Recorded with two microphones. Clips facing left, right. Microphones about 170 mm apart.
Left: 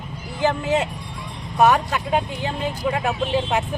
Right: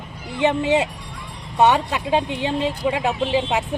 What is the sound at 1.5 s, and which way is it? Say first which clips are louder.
A woman's voice: even; 20° right (ahead or behind).